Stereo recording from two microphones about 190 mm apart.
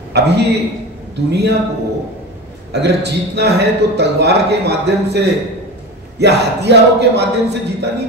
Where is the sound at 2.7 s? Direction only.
60° right (ahead or behind).